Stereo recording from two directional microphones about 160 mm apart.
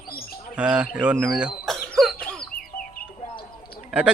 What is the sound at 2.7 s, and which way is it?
Music, 70° left (ahead or behind).